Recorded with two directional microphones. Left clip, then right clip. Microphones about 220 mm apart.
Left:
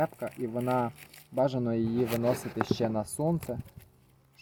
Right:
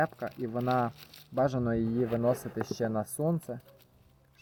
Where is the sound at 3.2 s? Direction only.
5° right (ahead or behind).